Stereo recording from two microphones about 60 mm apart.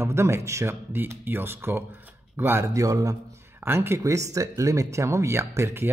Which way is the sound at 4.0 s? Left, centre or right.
Right.